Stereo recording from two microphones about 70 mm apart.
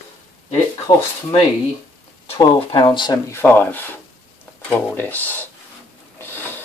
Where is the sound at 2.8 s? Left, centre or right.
Left.